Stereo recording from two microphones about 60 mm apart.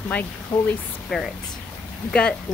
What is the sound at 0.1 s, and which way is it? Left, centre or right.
Speech, left.